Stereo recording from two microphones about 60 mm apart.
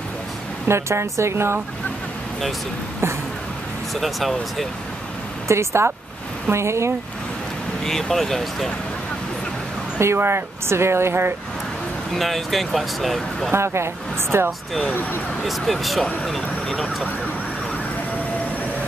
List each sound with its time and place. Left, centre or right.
0.7 s speech: right
3.9 s speech: centre
5.5 s speech: right
7.8 s speech: centre
9.9 s speech: right
12.1 s speech: centre
13.5 s speech: right
15.4 s speech: centre